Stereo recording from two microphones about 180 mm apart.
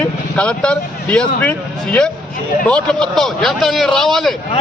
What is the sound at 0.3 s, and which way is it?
A man's voice, 5° left (ahead or behind).